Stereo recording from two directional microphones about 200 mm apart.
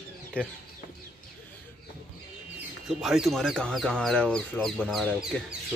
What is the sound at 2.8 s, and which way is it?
Speech, 5° right (ahead or behind).